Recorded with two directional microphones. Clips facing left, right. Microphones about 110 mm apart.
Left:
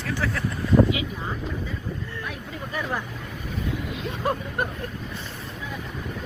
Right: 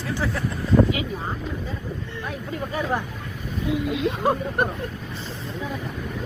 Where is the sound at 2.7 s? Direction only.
20° right (ahead or behind).